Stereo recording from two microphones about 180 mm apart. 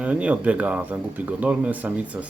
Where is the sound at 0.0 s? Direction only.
5° right (ahead or behind).